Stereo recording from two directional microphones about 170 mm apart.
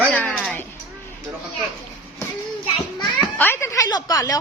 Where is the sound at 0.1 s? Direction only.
10° left (ahead or behind).